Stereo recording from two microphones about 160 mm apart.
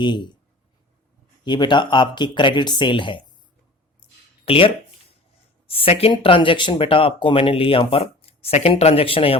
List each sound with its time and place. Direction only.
0.0 s speech: 30° left (ahead or behind)
1.5 s speech: 30° left (ahead or behind)
4.4 s speech: 35° left (ahead or behind)